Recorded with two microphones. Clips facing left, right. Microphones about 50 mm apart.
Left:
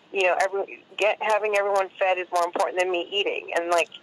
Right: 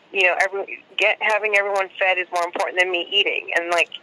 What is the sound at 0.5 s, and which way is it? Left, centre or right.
Speech, right.